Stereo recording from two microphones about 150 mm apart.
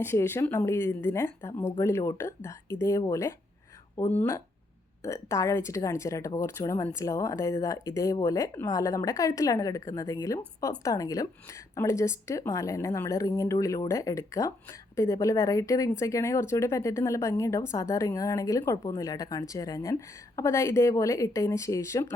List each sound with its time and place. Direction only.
0.0 s a woman's voice: 15° left (ahead or behind)